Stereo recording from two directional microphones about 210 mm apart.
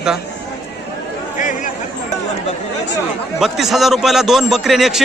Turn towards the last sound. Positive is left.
turn(degrees=0)  # may be behind; listen again after turning